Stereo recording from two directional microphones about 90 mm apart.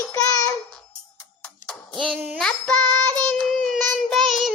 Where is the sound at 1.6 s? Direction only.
5° left (ahead or behind).